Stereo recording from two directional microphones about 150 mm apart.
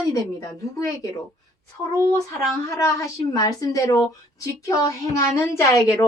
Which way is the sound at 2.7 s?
20° left (ahead or behind).